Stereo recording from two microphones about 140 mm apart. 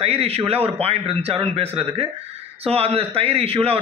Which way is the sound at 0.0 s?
45° right (ahead or behind).